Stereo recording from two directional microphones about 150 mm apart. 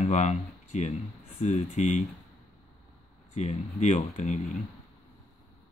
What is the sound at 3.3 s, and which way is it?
Speech, 50° left (ahead or behind).